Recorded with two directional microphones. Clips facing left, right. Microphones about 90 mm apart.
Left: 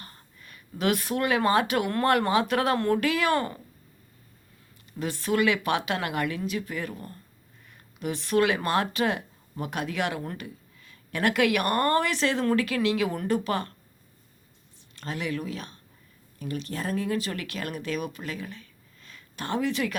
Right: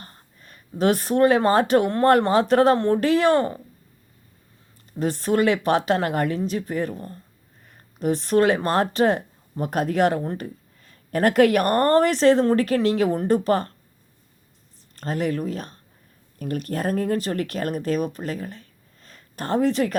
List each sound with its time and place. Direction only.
0.0 s speech: 35° right (ahead or behind)
2.7 s speech: 25° right (ahead or behind)
3.0 s speech: 35° right (ahead or behind)
4.9 s speech: 35° right (ahead or behind)
14.9 s speech: 40° right (ahead or behind)
16.4 s speech: 50° right (ahead or behind)